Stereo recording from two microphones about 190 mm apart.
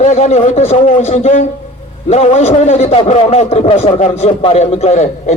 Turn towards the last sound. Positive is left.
turn(degrees=40)  # may be behind; listen again after turning